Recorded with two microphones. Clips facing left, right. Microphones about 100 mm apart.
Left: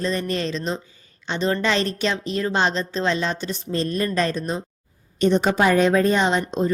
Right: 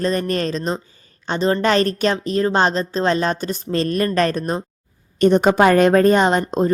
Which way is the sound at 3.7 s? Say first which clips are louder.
Right 4 dB; 70° right (ahead or behind).